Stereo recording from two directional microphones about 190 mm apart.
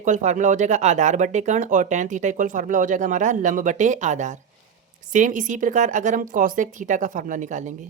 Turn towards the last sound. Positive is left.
turn(degrees=-40)  # may be behind; listen again after turning